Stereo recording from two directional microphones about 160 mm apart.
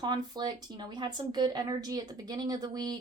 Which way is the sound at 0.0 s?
25° right (ahead or behind).